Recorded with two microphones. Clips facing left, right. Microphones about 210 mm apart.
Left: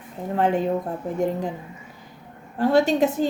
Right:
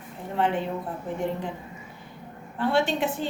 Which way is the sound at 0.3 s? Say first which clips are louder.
Left 4 dB; 45° left (ahead or behind).